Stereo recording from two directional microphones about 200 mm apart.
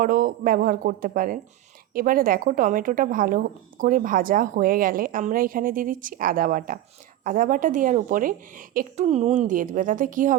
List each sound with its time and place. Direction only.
0.0 s a woman's voice: 45° right (ahead or behind)